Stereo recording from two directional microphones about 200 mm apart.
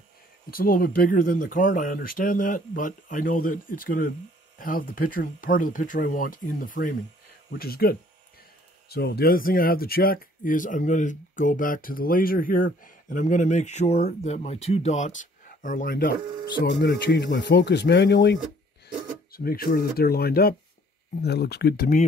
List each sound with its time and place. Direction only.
0.5 s speech: 45° left (ahead or behind)
16.6 s speech: 60° left (ahead or behind)